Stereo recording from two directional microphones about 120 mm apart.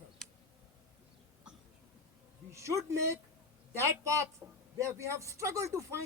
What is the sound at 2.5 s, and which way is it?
Speech, 25° right (ahead or behind).